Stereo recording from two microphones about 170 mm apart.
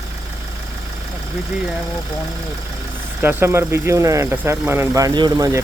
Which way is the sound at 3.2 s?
15° right (ahead or behind).